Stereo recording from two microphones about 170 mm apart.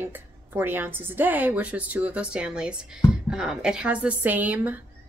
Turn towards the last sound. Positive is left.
turn(degrees=-10)  # may be behind; listen again after turning